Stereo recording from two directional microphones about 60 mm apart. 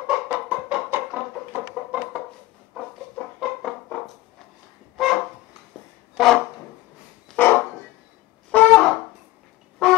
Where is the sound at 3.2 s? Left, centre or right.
Left.